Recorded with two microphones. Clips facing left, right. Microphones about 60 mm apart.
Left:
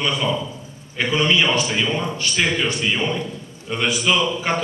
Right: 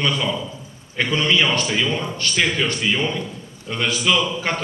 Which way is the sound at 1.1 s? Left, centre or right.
Left.